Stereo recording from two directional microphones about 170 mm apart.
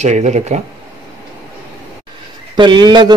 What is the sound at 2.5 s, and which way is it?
Speech, 25° right (ahead or behind).